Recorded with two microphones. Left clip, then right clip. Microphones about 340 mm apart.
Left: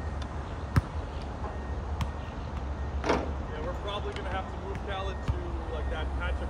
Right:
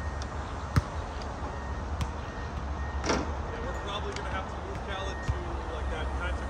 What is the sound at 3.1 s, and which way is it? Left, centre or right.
Vehicle, left.